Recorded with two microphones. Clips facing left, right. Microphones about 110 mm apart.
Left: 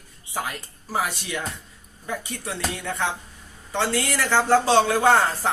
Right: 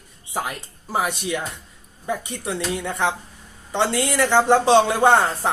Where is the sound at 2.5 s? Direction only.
20° right (ahead or behind).